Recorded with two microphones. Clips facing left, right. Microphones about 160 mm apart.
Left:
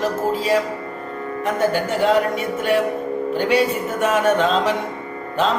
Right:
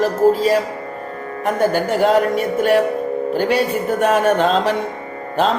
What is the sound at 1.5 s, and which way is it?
Music, 40° right (ahead or behind).